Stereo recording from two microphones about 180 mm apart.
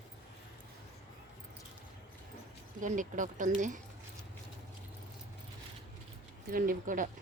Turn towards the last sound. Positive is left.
turn(degrees=-45)  # may be behind; listen again after turning